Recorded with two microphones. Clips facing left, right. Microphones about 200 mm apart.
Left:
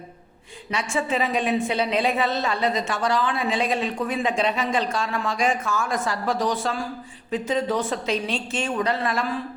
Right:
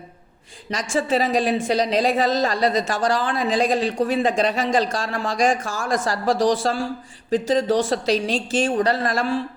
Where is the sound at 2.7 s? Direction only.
90° right.